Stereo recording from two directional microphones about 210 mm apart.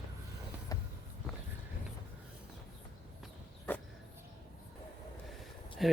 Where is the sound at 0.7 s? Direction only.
15° left (ahead or behind).